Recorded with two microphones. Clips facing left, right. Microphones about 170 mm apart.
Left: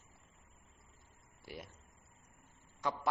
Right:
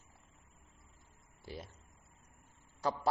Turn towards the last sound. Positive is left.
turn(degrees=-35)  # may be behind; listen again after turning